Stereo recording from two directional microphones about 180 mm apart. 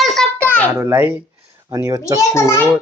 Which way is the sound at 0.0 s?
Centre (ahead or behind).